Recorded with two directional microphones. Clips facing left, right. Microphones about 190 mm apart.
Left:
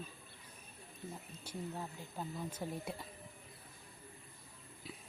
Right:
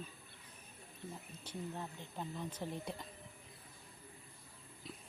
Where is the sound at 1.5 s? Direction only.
5° left (ahead or behind).